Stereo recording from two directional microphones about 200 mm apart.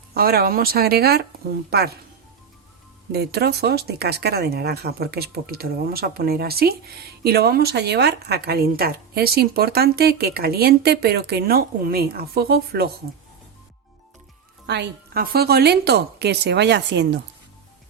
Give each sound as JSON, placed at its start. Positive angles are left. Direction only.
{"t": 0.1, "sound": "speech", "side_deg": -50}
{"t": 3.1, "sound": "speech", "side_deg": -55}
{"t": 14.7, "sound": "a woman's voice", "side_deg": -55}